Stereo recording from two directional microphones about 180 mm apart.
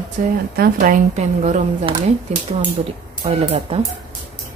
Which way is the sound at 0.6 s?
45° right (ahead or behind).